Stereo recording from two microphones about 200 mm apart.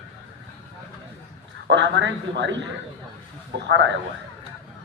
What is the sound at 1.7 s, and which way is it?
A man's voice, 60° right (ahead or behind).